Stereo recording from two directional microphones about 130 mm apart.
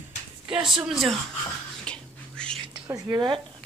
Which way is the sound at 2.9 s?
35° right (ahead or behind).